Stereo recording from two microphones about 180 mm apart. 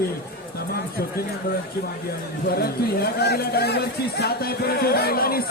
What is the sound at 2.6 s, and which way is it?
Speech, 60° left (ahead or behind).